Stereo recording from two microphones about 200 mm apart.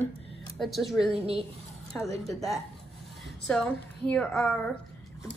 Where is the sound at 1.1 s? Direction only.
25° right (ahead or behind).